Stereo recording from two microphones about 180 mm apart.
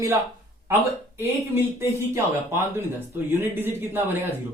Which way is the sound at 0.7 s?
15° right (ahead or behind).